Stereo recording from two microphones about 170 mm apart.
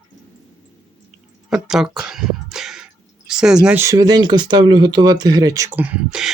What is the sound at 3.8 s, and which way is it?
Speech, 20° right (ahead or behind).